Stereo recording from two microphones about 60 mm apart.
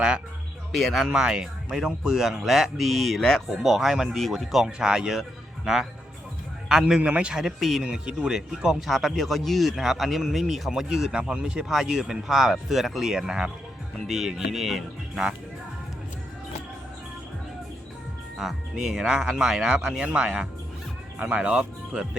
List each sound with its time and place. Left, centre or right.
0.7 s speech: centre
1.0 s speech: centre
4.6 s speech: centre
7.4 s speech: centre
7.9 s speech: centre
11.2 s speech: right
11.4 s speech: centre
18.3 s speech: centre
20.1 s speech: centre